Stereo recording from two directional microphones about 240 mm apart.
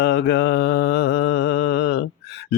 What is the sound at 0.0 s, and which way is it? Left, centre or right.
Mantra, left.